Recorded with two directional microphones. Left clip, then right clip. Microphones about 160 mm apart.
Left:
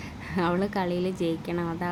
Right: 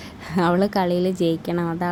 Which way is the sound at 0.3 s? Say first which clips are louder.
Right 7 dB; 35° right (ahead or behind).